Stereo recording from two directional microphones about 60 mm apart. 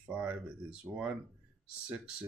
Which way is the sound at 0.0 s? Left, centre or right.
Centre.